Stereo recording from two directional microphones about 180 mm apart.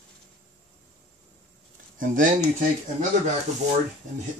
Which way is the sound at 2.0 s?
45° right (ahead or behind).